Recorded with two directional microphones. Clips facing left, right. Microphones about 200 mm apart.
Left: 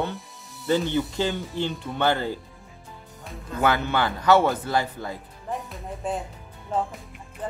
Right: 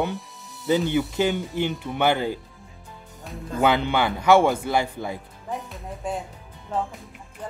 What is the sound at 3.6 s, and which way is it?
Speech, 15° right (ahead or behind).